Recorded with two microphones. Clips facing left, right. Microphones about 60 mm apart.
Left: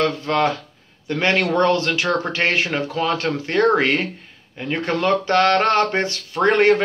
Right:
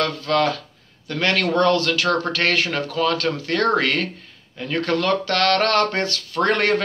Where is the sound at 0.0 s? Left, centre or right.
Left.